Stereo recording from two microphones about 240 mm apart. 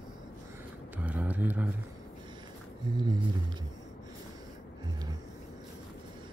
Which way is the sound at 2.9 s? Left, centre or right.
Centre.